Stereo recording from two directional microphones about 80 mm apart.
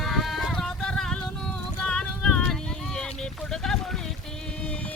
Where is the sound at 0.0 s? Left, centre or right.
Centre.